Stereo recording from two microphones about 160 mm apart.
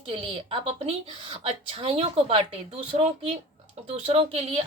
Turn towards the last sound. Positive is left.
turn(degrees=-40)  # may be behind; listen again after turning